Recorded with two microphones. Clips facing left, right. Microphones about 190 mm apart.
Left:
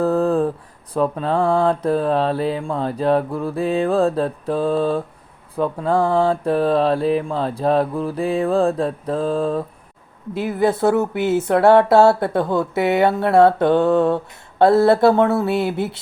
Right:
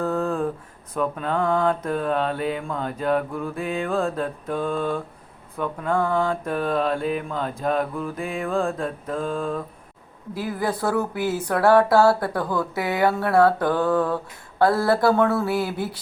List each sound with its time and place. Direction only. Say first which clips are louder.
0.0 s a sound: left 6 dB; 35° left (ahead or behind)
0.9 s mantra: left 5 dB; 30° left (ahead or behind)
10.3 s speech: left 7 dB; 25° left (ahead or behind)